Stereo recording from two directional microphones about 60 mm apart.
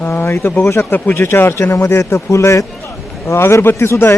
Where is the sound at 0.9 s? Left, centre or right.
Left.